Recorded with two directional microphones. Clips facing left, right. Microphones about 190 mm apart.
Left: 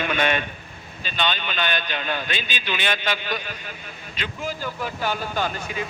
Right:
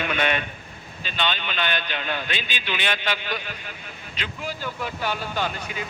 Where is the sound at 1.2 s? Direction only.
45° left (ahead or behind).